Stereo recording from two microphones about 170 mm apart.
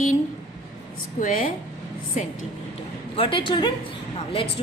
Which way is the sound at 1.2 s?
55° left (ahead or behind).